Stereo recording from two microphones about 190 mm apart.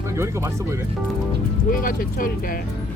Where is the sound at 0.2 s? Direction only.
15° right (ahead or behind).